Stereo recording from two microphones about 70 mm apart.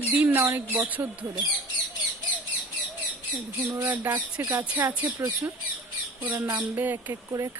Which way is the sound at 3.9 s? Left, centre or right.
Right.